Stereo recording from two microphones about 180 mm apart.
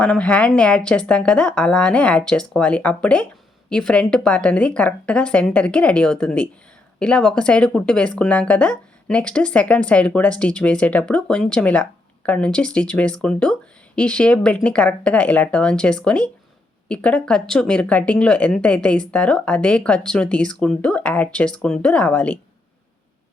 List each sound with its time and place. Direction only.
0.0 s speech: 5° left (ahead or behind)